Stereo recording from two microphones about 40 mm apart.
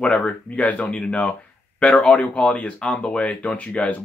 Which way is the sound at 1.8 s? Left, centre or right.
Left.